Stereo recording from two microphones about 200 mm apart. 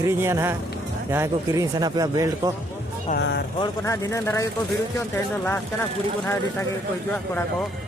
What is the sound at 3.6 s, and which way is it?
Speech, 15° left (ahead or behind).